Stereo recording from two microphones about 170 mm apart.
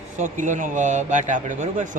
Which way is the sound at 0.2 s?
45° right (ahead or behind).